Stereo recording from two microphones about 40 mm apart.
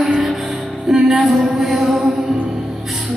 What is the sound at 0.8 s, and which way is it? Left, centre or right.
Music, centre.